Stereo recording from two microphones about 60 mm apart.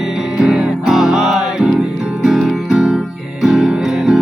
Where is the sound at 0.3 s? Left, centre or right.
Centre.